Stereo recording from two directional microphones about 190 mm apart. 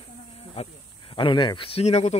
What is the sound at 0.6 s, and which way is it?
Speech, 30° left (ahead or behind).